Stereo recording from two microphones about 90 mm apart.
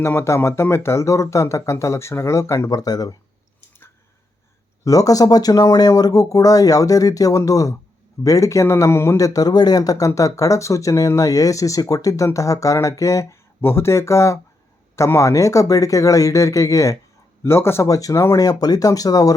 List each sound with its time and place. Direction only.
0.0 s speech: 30° left (ahead or behind)
2.6 s speech: 45° left (ahead or behind)
4.8 s speech: 40° left (ahead or behind)
17.8 s speech: 40° left (ahead or behind)